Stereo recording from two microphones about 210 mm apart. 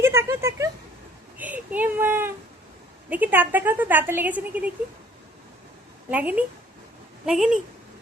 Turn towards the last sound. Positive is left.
turn(degrees=-5)  # may be behind; listen again after turning